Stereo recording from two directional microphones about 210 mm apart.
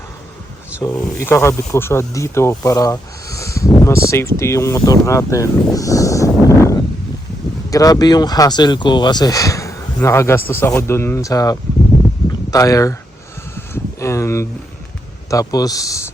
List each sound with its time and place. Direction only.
0.8 s speech: 15° left (ahead or behind)
13.6 s a sound: 15° left (ahead or behind)
15.3 s speech: 15° left (ahead or behind)